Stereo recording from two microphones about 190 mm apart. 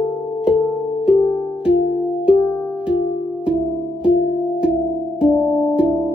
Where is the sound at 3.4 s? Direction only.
5° right (ahead or behind).